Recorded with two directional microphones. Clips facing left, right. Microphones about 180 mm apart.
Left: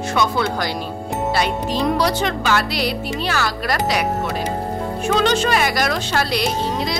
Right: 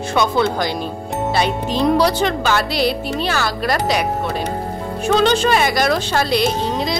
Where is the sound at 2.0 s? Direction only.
30° right (ahead or behind).